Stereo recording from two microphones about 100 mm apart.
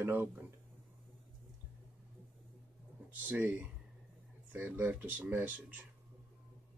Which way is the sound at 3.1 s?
20° right (ahead or behind).